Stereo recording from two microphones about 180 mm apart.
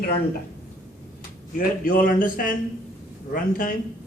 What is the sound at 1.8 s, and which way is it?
A man's voice, 45° left (ahead or behind).